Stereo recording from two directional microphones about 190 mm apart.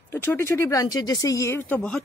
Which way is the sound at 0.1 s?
10° left (ahead or behind).